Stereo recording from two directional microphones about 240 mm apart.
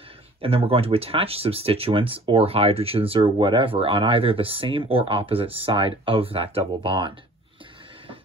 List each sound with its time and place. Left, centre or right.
0.4 s speech: right